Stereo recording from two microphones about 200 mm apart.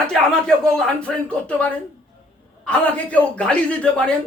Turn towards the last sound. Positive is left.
turn(degrees=5)  # may be behind; listen again after turning